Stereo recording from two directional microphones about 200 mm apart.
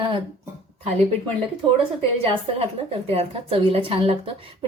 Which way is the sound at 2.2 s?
30° right (ahead or behind).